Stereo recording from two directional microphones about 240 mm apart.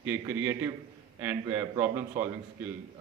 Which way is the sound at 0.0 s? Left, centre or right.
Centre.